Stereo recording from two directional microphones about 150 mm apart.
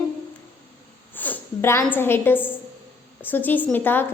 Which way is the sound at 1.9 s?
15° left (ahead or behind).